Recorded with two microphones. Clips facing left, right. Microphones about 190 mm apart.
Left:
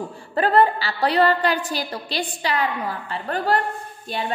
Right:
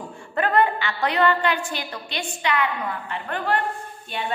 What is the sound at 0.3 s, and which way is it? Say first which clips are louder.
A woman's voice: left 3 dB; 35° left (ahead or behind).